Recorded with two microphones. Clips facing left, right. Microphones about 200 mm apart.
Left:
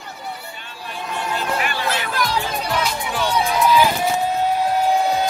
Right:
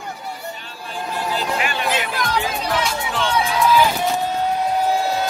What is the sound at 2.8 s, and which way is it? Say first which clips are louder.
Run: even; 5° left (ahead or behind).